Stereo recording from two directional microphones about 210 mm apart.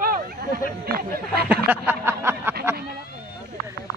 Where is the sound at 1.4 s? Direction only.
10° right (ahead or behind).